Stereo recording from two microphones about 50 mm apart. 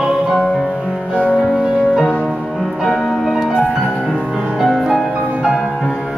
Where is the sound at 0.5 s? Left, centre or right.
Centre.